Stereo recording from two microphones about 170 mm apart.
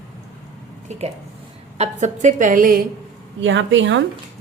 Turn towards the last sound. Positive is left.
turn(degrees=-90)